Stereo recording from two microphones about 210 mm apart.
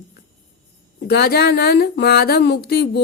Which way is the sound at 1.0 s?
50° left (ahead or behind).